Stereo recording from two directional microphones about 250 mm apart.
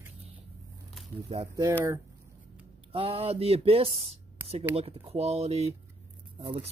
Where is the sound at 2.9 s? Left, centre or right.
Right.